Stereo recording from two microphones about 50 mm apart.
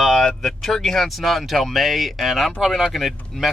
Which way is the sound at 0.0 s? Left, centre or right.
Centre.